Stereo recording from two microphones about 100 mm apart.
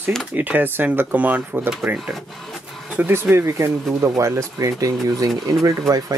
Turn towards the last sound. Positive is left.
turn(degrees=-35)  # may be behind; listen again after turning